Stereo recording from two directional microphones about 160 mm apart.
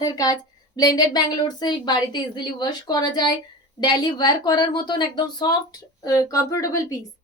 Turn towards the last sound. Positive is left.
turn(degrees=20)  # may be behind; listen again after turning